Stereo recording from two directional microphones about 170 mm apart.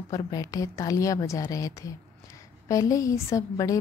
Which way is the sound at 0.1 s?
20° left (ahead or behind).